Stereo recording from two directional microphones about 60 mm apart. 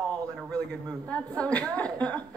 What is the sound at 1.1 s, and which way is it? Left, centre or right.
A woman's voice, centre.